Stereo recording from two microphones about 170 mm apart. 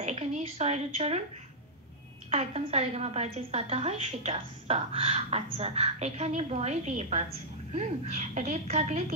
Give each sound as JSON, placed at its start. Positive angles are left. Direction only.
{"t": 0.0, "sound": "a woman's voice", "side_deg": -35}
{"t": 2.3, "sound": "a woman's voice", "side_deg": -40}